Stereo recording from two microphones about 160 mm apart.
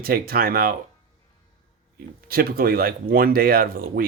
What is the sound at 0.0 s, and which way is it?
Speech, 70° right (ahead or behind).